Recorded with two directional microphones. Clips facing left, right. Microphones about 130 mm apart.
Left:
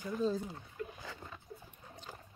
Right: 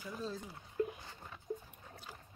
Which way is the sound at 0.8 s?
30° right (ahead or behind).